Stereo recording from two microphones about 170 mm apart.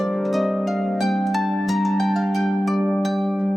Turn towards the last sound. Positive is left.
turn(degrees=0)  # may be behind; listen again after turning